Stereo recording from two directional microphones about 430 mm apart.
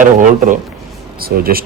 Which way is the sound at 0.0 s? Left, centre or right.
Centre.